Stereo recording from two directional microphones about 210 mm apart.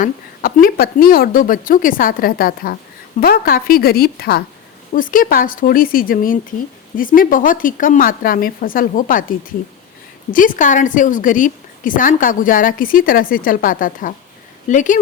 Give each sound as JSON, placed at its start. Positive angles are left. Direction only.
{"t": 0.0, "sound": "a woman's voice", "side_deg": 40}